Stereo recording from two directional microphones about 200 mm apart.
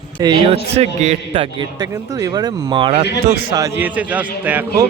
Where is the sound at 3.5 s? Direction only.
15° right (ahead or behind).